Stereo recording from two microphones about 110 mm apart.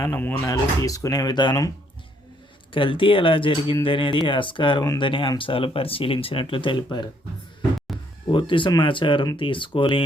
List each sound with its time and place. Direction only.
0.1 s speech: 20° left (ahead or behind)
0.4 s speech: 30° left (ahead or behind)
2.7 s speech: 50° left (ahead or behind)
7.9 s a sound: centre (ahead or behind)
8.3 s speech: 50° left (ahead or behind)